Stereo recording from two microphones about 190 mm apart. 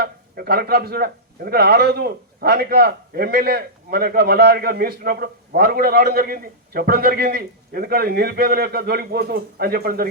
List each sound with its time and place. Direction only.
0.0 s a man's voice: 55° right (ahead or behind)